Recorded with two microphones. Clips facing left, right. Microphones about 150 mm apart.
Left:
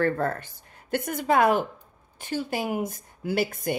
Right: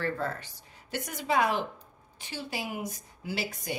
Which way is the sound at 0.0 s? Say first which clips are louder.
Left 7 dB; 50° left (ahead or behind).